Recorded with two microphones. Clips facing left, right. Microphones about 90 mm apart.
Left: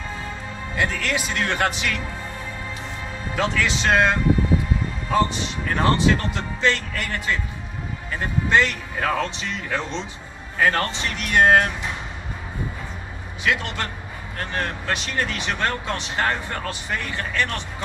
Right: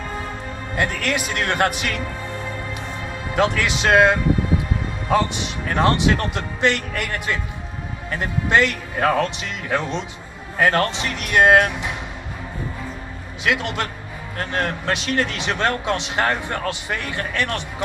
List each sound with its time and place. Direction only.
0.7 s speech: 60° right (ahead or behind)
3.3 s speech: 65° right (ahead or behind)
5.1 s speech: 75° right (ahead or behind)
8.5 s speech: 65° right (ahead or behind)
13.4 s speech: 75° right (ahead or behind)